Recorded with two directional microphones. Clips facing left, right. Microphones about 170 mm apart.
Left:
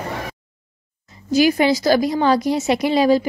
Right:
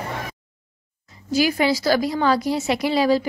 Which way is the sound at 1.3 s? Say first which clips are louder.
Left 4 dB; 20° left (ahead or behind).